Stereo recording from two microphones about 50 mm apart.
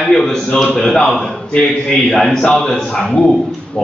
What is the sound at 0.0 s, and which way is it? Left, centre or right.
Speech, centre.